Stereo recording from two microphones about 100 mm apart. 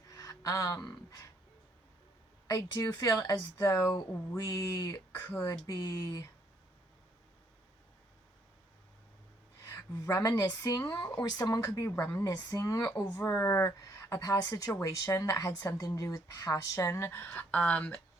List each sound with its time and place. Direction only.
0.1 s a sound: 35° left (ahead or behind)
2.5 s speech: 35° left (ahead or behind)
5.3 s speech: 30° left (ahead or behind)
9.6 s speech: 30° left (ahead or behind)
11.9 s speech: 25° left (ahead or behind)
12.2 s speech: 40° left (ahead or behind)
17.2 s speech: 15° left (ahead or behind)